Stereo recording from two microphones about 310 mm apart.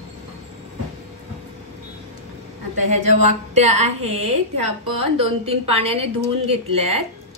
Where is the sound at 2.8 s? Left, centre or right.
Right.